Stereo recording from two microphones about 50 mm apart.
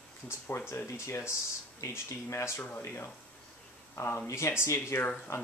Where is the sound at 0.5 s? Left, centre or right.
Left.